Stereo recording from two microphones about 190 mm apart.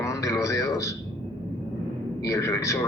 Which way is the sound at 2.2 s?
15° left (ahead or behind).